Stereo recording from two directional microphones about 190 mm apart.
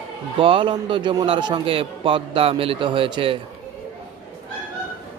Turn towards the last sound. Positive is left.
turn(degrees=-30)  # may be behind; listen again after turning